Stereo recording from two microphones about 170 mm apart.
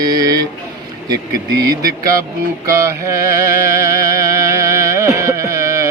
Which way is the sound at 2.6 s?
15° right (ahead or behind).